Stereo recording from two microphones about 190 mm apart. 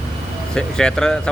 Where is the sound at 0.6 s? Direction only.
5° left (ahead or behind).